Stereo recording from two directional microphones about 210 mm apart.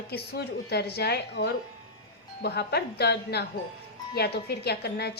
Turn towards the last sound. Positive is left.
turn(degrees=50)  # may be behind; listen again after turning